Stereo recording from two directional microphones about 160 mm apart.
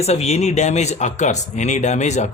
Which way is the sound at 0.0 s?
40° left (ahead or behind).